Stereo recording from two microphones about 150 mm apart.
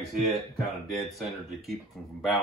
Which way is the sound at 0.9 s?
Centre (ahead or behind).